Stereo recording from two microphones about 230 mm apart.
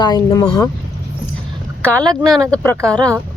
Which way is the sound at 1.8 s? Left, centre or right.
Centre.